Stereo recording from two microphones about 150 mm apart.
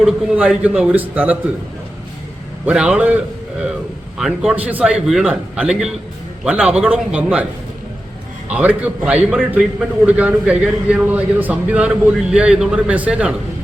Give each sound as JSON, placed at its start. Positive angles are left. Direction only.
{"t": 0.0, "sound": "a man's voice", "side_deg": -10}
{"t": 2.6, "sound": "a man's voice", "side_deg": -5}
{"t": 4.2, "sound": "a man's voice", "side_deg": -5}
{"t": 8.4, "sound": "a man's voice", "side_deg": -10}